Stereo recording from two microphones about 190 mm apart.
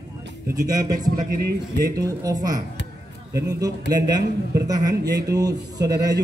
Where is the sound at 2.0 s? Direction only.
20° right (ahead or behind).